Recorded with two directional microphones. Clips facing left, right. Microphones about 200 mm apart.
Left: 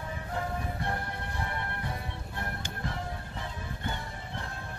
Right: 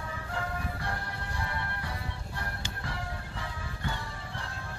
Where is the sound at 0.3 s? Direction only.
20° left (ahead or behind).